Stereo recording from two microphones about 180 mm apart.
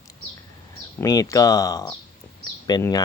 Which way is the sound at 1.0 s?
20° left (ahead or behind).